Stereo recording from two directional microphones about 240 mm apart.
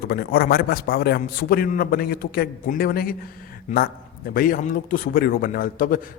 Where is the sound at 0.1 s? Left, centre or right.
Left.